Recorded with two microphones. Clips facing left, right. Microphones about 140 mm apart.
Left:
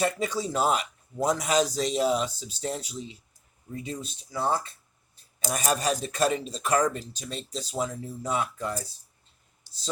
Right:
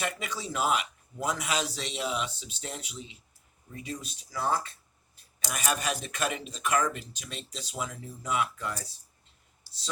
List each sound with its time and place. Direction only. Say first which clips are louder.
0.0 s a man's voice: left 7 dB; 35° left (ahead or behind)
3.8 s a man's voice: left 3 dB; 25° left (ahead or behind)